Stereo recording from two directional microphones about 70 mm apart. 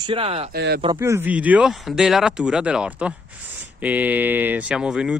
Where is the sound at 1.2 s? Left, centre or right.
Right.